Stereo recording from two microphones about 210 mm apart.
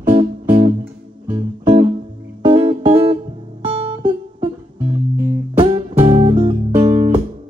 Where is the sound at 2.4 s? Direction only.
25° right (ahead or behind).